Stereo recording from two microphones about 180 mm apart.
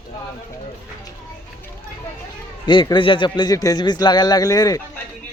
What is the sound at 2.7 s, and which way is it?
A man's voice, 25° left (ahead or behind).